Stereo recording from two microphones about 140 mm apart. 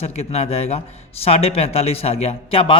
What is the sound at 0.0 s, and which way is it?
Speech, 50° left (ahead or behind).